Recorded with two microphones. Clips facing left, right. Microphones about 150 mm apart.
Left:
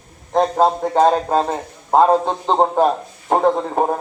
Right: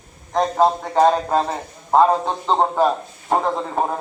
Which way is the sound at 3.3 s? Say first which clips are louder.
Left 4 dB; 30° left (ahead or behind).